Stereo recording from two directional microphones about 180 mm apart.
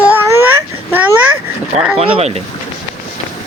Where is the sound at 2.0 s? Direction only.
35° right (ahead or behind).